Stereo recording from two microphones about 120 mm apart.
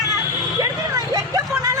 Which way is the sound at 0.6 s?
30° right (ahead or behind).